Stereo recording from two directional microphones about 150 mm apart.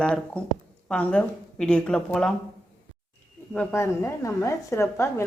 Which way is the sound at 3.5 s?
15° left (ahead or behind).